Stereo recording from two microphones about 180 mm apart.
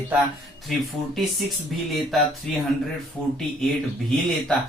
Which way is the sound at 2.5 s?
5° left (ahead or behind).